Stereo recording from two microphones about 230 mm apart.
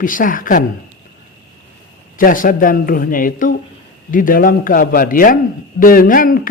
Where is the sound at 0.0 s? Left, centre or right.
Left.